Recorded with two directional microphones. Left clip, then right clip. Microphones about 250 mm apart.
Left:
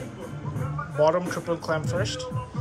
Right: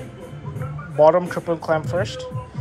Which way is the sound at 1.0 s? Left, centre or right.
Centre.